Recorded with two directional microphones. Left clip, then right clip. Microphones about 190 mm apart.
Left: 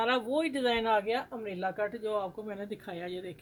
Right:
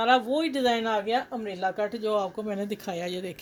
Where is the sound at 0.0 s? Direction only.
15° right (ahead or behind).